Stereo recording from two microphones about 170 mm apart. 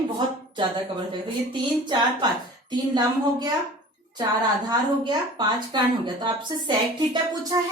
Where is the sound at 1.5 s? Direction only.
25° right (ahead or behind).